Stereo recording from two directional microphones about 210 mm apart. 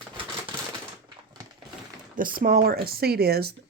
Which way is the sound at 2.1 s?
40° right (ahead or behind).